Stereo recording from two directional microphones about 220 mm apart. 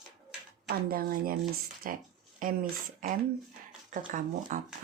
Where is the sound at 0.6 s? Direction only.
40° right (ahead or behind).